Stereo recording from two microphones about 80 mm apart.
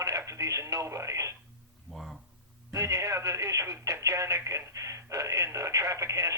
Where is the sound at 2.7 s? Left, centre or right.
Right.